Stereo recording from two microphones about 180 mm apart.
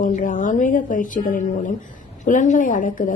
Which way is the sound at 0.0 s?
45° left (ahead or behind).